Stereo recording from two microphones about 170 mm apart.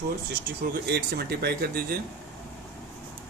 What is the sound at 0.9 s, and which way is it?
Speech, 70° right (ahead or behind).